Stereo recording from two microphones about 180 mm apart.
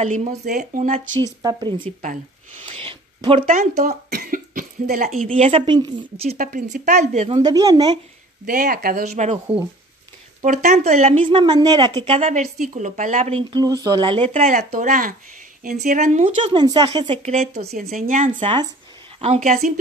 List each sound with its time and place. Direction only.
0.0 s speech: 40° right (ahead or behind)
1.2 s speech: 20° right (ahead or behind)
1.9 s speech: 45° right (ahead or behind)
2.6 s a sound: 30° right (ahead or behind)
4.1 s speech: 55° right (ahead or behind)
5.3 s speech: 30° right (ahead or behind)
6.3 s speech: 45° right (ahead or behind)
7.3 s speech: 20° right (ahead or behind)
8.5 s speech: 50° right (ahead or behind)
9.1 s speech: 35° right (ahead or behind)
11.2 s speech: 25° right (ahead or behind); by 16.3 s 45° right (ahead or behind)
16.3 s speech: 25° right (ahead or behind)
17.8 s speech: 45° right (ahead or behind)
18.3 s speech: 25° right (ahead or behind)